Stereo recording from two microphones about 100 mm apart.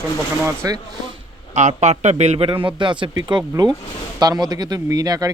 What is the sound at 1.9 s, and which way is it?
Speech, 90° right.